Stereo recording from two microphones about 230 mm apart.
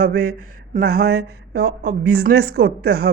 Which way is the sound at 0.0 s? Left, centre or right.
Right.